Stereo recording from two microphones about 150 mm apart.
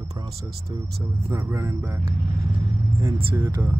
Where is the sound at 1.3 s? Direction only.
20° right (ahead or behind).